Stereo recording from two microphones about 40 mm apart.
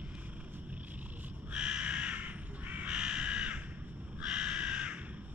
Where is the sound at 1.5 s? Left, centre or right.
Right.